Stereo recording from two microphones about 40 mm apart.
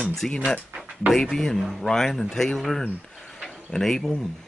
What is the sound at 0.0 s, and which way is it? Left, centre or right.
Speech, centre.